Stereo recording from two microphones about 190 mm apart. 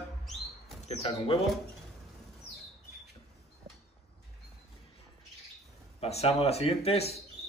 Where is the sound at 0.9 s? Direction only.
30° left (ahead or behind).